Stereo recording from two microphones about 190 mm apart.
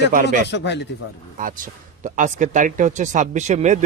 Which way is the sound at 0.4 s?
65° left (ahead or behind).